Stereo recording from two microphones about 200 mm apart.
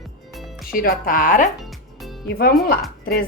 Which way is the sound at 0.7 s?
45° left (ahead or behind).